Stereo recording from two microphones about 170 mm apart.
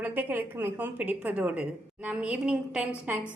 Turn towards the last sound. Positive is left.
turn(degrees=-5)  # may be behind; listen again after turning